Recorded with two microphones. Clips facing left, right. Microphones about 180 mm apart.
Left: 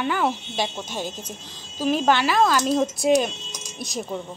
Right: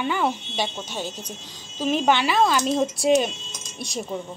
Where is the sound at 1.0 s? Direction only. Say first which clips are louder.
Left 1 dB; 50° left (ahead or behind).